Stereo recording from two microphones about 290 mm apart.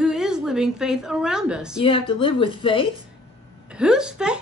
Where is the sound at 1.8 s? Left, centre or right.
Centre.